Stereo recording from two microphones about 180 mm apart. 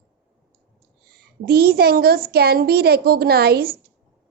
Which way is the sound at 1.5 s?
60° right (ahead or behind).